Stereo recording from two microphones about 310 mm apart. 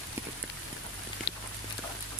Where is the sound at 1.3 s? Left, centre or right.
Left.